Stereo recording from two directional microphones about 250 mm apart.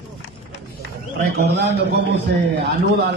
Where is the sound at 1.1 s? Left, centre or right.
Right.